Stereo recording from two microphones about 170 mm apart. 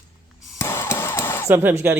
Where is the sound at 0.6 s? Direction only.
15° left (ahead or behind).